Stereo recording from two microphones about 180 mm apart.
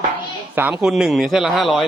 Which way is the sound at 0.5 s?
5° right (ahead or behind).